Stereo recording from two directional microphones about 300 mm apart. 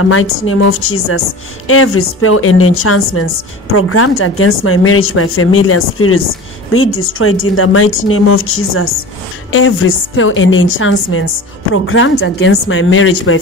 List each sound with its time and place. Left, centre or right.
0.0 s a woman's voice: left